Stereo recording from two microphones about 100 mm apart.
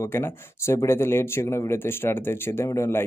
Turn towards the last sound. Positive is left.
turn(degrees=25)  # may be behind; listen again after turning